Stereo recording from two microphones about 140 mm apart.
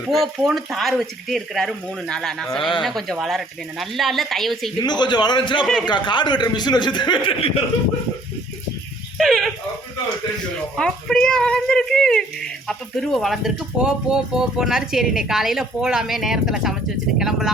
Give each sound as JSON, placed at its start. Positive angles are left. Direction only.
{"t": 0.1, "sound": "speech", "side_deg": 0}
{"t": 4.8, "sound": "a man's voice", "side_deg": 30}
{"t": 9.1, "sound": "dog", "side_deg": 0}
{"t": 10.8, "sound": "speech", "side_deg": 5}